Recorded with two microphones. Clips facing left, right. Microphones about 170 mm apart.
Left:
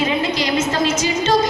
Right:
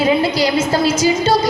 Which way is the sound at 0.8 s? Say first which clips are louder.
Right 4 dB; 10° right (ahead or behind).